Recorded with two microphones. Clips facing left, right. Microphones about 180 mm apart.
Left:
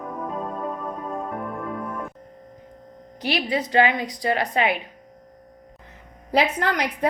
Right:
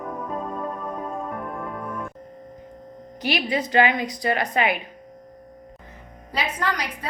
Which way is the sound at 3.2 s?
30° left (ahead or behind).